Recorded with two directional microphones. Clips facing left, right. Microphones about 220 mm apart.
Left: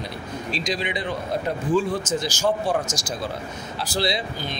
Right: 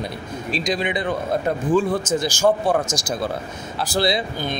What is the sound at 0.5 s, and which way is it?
Speech, 50° right (ahead or behind).